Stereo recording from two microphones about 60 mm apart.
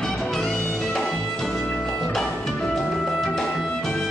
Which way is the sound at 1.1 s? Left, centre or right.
Centre.